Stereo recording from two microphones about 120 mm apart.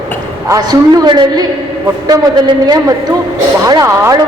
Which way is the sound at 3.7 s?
25° right (ahead or behind).